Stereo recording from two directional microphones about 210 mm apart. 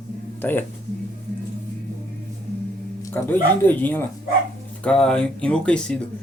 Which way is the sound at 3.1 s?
10° left (ahead or behind).